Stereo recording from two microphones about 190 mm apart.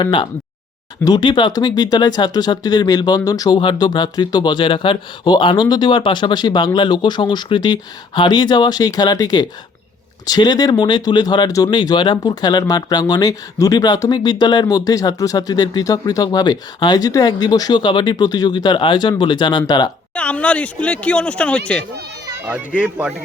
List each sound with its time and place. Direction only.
0.0 s speech: 25° left (ahead or behind)
20.1 s speech: 5° left (ahead or behind)
22.3 s speech: 10° right (ahead or behind)